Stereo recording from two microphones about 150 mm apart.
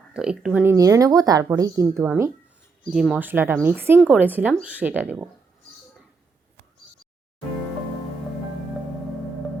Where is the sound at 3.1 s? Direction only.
10° right (ahead or behind).